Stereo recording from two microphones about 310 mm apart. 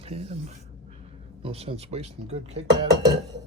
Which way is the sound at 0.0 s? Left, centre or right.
Centre.